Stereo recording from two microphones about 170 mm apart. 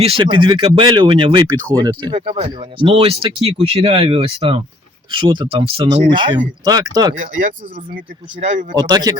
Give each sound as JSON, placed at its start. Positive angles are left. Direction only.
{"t": 0.0, "sound": "speech", "side_deg": -30}
{"t": 8.4, "sound": "a man's voice", "side_deg": -45}
{"t": 8.7, "sound": "speech", "side_deg": -25}